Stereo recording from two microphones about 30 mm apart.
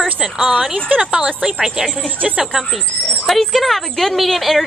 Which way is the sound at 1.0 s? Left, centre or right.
Right.